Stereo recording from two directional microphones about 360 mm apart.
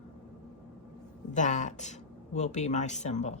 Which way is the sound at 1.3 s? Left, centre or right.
Centre.